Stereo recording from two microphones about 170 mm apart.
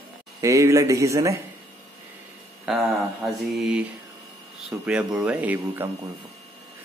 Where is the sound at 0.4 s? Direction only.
20° right (ahead or behind).